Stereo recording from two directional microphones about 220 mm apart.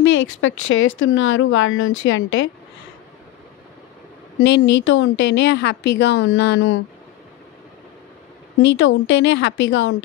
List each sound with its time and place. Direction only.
0.0 s speech: 60° left (ahead or behind)
4.4 s a woman's voice: 55° left (ahead or behind)
8.6 s speech: 55° left (ahead or behind)